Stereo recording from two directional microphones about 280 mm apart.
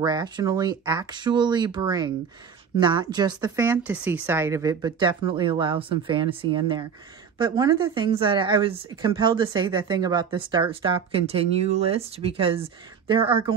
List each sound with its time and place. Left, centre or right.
0.0 s speech: centre